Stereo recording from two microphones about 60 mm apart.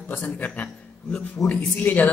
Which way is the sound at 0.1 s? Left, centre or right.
Left.